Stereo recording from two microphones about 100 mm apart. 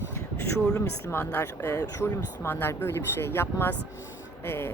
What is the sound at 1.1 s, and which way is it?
Speech, 20° left (ahead or behind).